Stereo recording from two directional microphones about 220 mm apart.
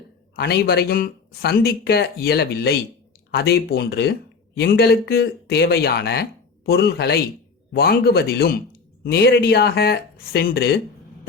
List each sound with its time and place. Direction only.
0.3 s speech: 45° left (ahead or behind)